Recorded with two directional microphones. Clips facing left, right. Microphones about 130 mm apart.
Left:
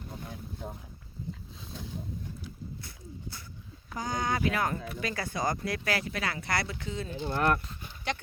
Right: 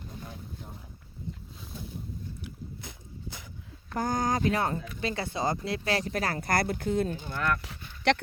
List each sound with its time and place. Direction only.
3.9 s speech: 50° right (ahead or behind)
7.3 s speech: 45° left (ahead or behind)
7.6 s a sound: 80° right